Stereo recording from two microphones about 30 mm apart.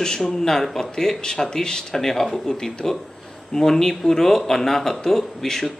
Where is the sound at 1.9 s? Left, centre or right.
Centre.